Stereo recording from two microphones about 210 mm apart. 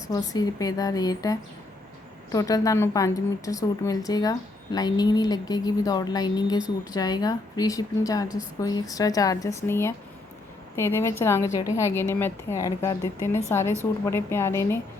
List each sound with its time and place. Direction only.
0.1 s a woman's voice: 15° left (ahead or behind)